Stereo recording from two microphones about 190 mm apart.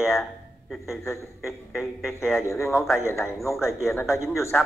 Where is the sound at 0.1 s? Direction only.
Centre (ahead or behind).